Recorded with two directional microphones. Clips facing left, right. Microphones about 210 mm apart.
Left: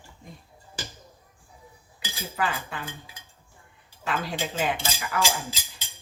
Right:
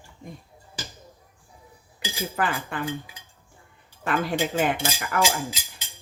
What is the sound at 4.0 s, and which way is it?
Speech, 55° right (ahead or behind).